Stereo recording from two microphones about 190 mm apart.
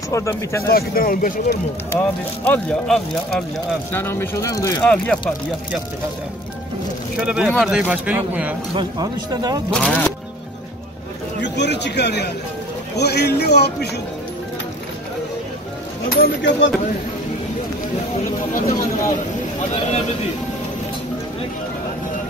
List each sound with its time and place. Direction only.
0.1 s speech: 15° left (ahead or behind)
0.7 s speech: 50° left (ahead or behind)
1.9 s speech: 10° left (ahead or behind)
4.8 s speech: 5° left (ahead or behind)
7.2 s speech: 5° right (ahead or behind)
8.7 s speech: 20° right (ahead or behind)
9.7 s speech: 5° left (ahead or behind)
11.4 s speech: 65° left (ahead or behind)
16.2 s speech: 70° left (ahead or behind)